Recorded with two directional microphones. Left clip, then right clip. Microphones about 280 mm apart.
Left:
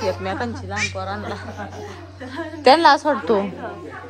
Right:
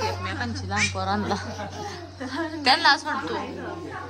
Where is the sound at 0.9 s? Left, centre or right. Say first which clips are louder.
Right 1 dB; centre.